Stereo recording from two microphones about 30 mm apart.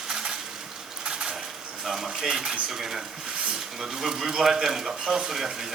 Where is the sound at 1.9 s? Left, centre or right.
Centre.